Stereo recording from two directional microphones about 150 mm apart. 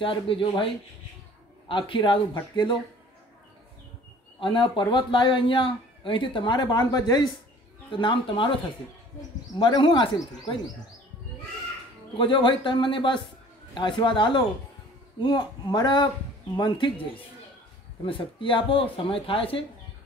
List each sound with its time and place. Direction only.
0.0 s speech: 35° left (ahead or behind)
1.7 s speech: 35° left (ahead or behind)
4.4 s speech: 35° left (ahead or behind)
9.6 s speech: 30° left (ahead or behind)
12.2 s speech: 35° left (ahead or behind)